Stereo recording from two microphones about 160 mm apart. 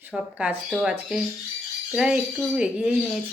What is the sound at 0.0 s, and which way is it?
Speech, 10° right (ahead or behind).